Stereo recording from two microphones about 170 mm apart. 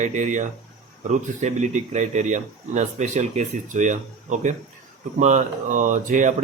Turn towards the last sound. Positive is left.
turn(degrees=-45)  # may be behind; listen again after turning